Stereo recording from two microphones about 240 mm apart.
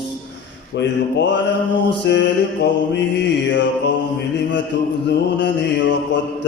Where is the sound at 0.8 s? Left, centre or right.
Left.